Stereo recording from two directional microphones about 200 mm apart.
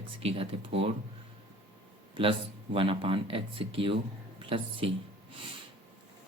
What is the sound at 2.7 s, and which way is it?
Speech, 25° right (ahead or behind).